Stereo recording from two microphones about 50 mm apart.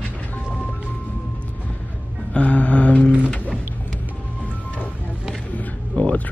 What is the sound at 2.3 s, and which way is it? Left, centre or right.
Music, left.